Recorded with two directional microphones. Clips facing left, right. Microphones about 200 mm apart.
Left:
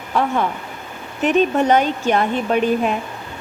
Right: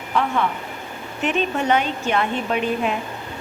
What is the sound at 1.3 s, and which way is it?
A woman's voice, 40° left (ahead or behind).